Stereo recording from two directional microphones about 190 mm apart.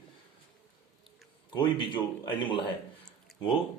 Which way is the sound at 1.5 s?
25° left (ahead or behind).